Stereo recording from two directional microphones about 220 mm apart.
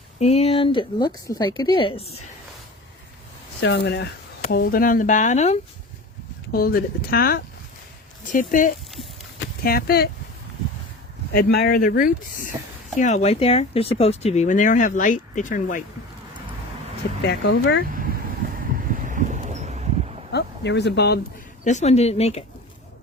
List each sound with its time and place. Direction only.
0.2 s a woman's voice: 30° left (ahead or behind)
3.6 s speech: 50° left (ahead or behind); by 5.5 s 30° left (ahead or behind)
6.5 s speech: 40° left (ahead or behind)
11.3 s speech: 45° left (ahead or behind)
17.2 s speech: 50° left (ahead or behind)
18.7 s vehicle: 40° right (ahead or behind)
20.3 s speech: 50° left (ahead or behind)
21.6 s a woman's voice: 30° left (ahead or behind)